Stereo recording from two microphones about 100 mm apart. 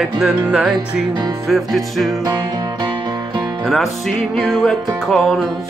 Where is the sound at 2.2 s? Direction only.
45° right (ahead or behind).